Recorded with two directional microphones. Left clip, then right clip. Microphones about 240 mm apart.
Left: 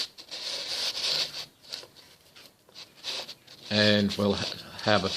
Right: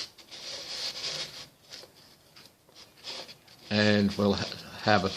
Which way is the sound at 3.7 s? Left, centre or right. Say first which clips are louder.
Left 2 dB; centre.